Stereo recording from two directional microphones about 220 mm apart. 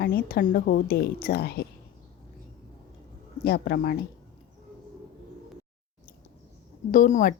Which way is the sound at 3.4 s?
45° left (ahead or behind).